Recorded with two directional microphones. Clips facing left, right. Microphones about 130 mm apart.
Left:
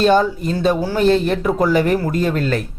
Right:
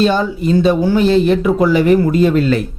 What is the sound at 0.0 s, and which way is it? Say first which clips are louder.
Speech: even; 50° left (ahead or behind).